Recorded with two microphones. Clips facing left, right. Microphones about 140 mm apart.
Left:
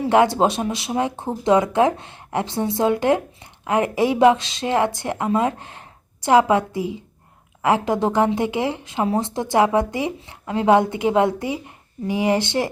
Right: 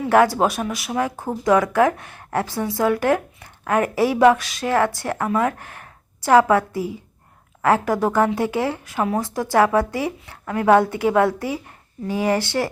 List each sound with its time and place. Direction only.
0.1 s speech: 25° left (ahead or behind)